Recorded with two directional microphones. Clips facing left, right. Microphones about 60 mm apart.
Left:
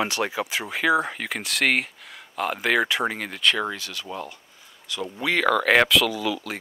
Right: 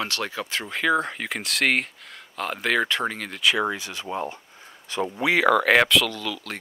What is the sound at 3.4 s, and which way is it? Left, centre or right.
Speech, centre.